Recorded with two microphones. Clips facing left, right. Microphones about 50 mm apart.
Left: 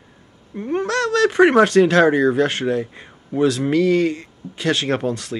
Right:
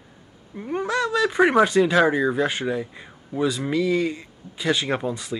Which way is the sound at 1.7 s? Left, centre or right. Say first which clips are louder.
Left 5 dB; left.